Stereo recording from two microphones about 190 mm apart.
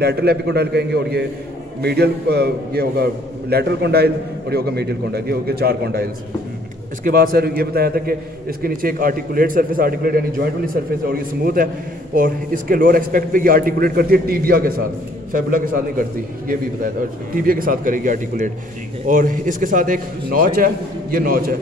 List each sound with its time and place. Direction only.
0.0 s a man's voice: 60° right (ahead or behind)
7.1 s a man's voice: 50° right (ahead or behind)